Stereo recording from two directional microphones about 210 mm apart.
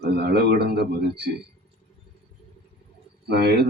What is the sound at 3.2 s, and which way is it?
Speech, 50° right (ahead or behind).